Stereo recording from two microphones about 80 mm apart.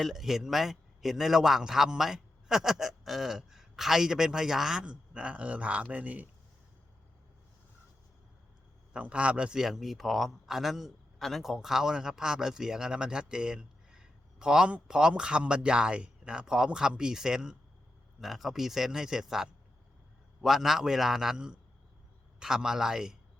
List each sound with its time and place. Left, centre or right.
0.0 s a man's voice: centre
8.9 s a man's voice: centre